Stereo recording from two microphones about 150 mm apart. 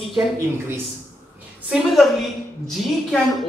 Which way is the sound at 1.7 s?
Centre (ahead or behind).